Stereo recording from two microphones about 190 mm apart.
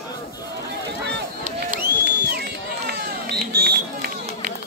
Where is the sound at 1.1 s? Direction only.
60° right (ahead or behind).